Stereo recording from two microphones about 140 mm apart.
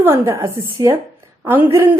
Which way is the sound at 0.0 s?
20° right (ahead or behind).